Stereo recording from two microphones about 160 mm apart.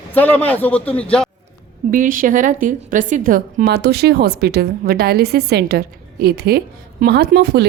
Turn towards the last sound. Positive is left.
turn(degrees=-90)